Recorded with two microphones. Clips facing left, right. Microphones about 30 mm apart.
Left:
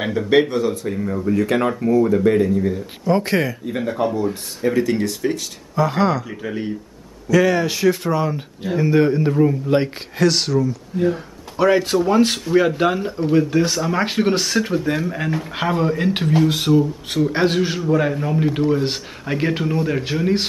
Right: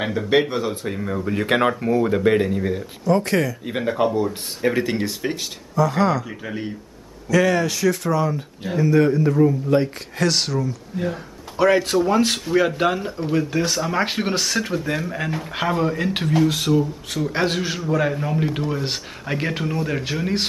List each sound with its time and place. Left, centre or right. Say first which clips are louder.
0.0 s speech: left 3 dB; centre
1.0 s speech: left 4 dB; right
1.7 s speech: left 3 dB; right
3.1 s speech: left 1 dB; centre
3.6 s speech: even; right
5.9 s speech: left 2 dB; centre
6.2 s speech: left 3 dB; centre
7.6 s speech: left 2 dB; left
10.1 s speech: left 4 dB; centre